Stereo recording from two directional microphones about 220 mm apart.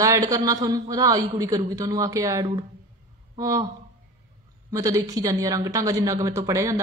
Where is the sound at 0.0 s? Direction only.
15° right (ahead or behind).